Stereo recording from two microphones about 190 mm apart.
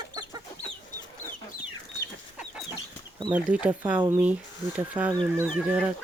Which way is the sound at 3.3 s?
5° right (ahead or behind).